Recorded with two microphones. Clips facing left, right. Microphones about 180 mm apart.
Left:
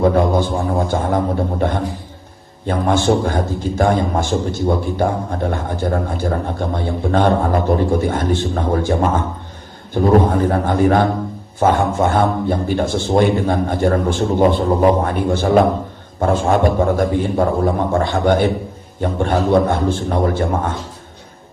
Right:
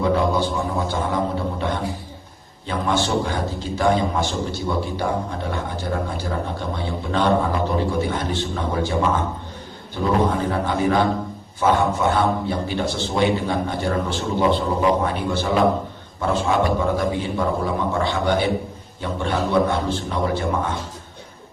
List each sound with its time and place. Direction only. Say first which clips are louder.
0.0 s a man's voice: left 5 dB; 50° left (ahead or behind)